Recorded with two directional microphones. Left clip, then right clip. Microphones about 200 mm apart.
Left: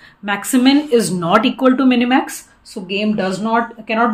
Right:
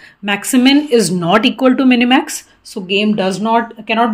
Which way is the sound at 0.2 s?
35° right (ahead or behind).